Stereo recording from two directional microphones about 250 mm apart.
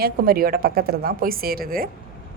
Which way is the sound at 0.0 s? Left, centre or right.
Right.